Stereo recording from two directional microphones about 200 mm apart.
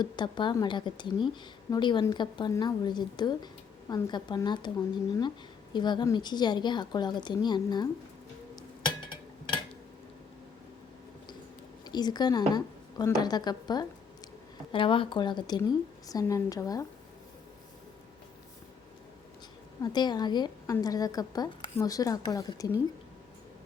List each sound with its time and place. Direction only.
0.0 s a woman's voice: 20° left (ahead or behind)
5.7 s a woman's voice: 20° left (ahead or behind)
11.9 s a woman's voice: 20° left (ahead or behind)
19.8 s a woman's voice: 20° left (ahead or behind)